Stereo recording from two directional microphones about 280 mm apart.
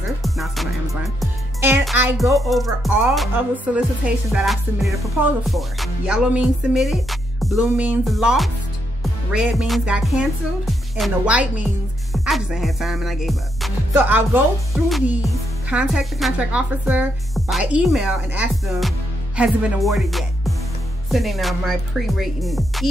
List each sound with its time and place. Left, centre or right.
0.2 s music: centre
1.2 s speech: centre
12.1 s music: centre
14.9 s speech: centre